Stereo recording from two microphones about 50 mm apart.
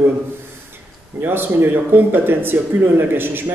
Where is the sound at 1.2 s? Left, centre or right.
Right.